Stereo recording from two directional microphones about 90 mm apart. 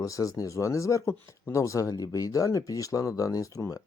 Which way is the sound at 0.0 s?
35° left (ahead or behind).